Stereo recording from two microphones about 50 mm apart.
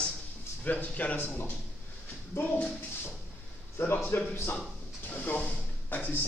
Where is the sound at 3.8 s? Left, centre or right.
Left.